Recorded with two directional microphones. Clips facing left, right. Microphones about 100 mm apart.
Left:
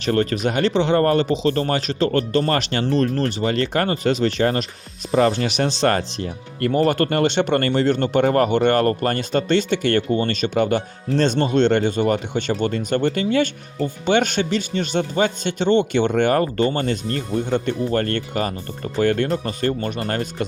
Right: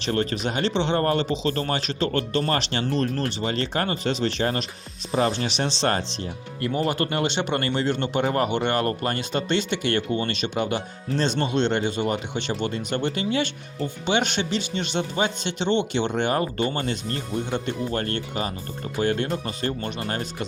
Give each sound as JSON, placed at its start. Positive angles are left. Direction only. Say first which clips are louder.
{"t": 0.0, "sound": "speech", "louder": "left 5 dB", "side_deg": 45}
{"t": 19.3, "sound": "speech", "louder": "left 5 dB", "side_deg": 40}